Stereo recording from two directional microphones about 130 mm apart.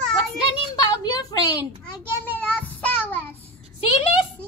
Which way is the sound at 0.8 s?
30° left (ahead or behind).